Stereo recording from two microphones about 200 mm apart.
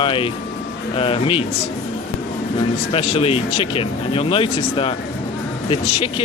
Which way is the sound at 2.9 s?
30° left (ahead or behind).